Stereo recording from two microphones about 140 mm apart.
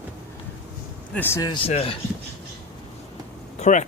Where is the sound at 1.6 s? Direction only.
45° left (ahead or behind).